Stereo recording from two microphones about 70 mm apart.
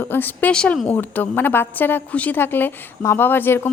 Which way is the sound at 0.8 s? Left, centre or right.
Left.